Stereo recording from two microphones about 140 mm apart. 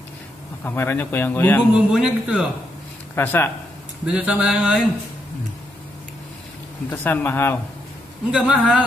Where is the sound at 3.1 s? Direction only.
15° left (ahead or behind).